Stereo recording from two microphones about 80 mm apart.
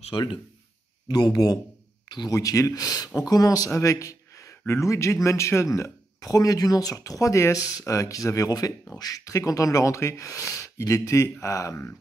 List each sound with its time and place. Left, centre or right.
0.1 s speech: left
1.0 s speech: left